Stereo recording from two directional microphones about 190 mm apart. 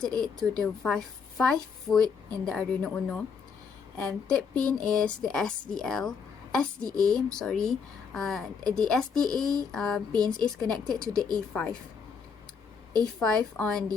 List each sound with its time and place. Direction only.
0.0 s speech: 5° left (ahead or behind)
13.1 s speech: 5° left (ahead or behind)